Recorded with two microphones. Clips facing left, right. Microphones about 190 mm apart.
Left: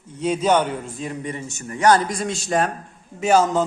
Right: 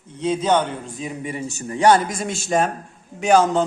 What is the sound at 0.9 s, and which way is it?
Speech, 5° right (ahead or behind).